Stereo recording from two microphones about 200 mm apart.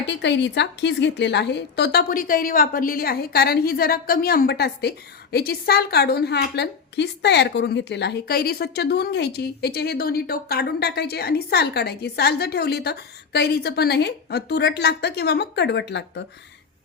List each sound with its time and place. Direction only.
0.1 s a woman's voice: 60° left (ahead or behind)